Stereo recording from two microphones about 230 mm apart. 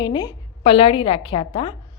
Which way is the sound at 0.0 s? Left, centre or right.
Centre.